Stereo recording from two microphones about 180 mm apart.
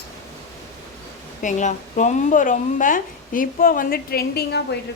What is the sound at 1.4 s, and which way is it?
A woman's voice, 45° left (ahead or behind).